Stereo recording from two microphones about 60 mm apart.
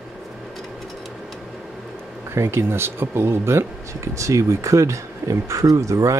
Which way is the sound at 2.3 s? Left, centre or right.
Right.